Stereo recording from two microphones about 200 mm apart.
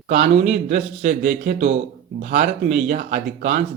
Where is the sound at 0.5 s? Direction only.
40° right (ahead or behind).